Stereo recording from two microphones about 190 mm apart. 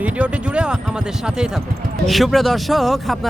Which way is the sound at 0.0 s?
5° right (ahead or behind).